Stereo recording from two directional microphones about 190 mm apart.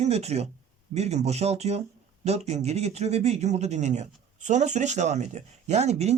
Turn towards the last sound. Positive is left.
turn(degrees=-35)  # may be behind; listen again after turning